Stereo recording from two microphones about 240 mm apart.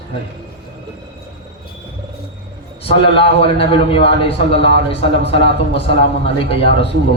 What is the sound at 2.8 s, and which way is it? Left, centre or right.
A man's voice, left.